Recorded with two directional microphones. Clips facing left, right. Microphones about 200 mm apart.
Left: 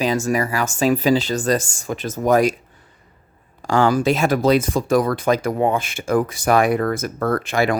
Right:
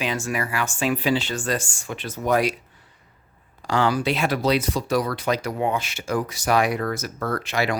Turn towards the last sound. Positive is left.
turn(degrees=50)  # may be behind; listen again after turning